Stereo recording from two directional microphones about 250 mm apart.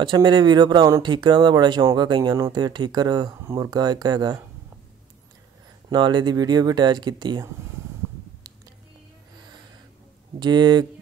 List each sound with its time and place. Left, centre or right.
0.0 s speech: centre
5.9 s speech: centre
10.4 s speech: centre